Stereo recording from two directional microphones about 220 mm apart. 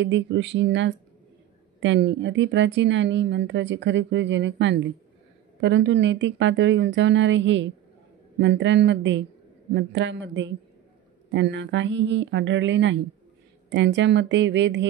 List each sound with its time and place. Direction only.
0.0 s a woman's voice: 55° right (ahead or behind)